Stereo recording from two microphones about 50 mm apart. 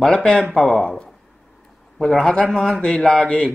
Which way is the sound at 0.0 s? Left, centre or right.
Centre.